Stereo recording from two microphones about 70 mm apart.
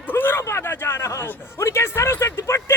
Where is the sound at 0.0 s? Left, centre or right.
Left.